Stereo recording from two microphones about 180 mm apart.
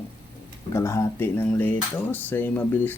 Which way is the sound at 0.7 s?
15° left (ahead or behind).